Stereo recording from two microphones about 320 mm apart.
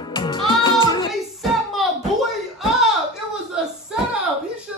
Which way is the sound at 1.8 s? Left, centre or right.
Centre.